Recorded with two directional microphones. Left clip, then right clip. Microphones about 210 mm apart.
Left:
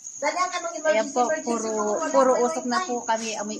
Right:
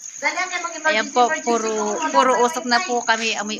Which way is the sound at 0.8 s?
20° right (ahead or behind).